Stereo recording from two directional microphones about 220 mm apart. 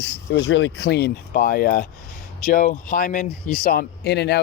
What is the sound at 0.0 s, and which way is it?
Speech, 55° left (ahead or behind).